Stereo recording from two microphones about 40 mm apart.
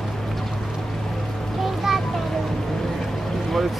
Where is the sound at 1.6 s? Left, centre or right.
Centre.